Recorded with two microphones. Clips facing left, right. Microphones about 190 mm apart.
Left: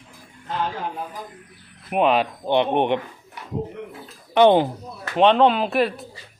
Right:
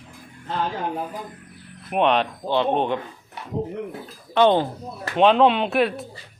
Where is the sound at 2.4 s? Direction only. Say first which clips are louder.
Left 2 dB; 20° left (ahead or behind).